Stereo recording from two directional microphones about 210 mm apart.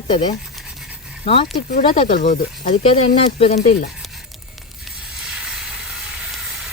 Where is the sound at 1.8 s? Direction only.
30° left (ahead or behind).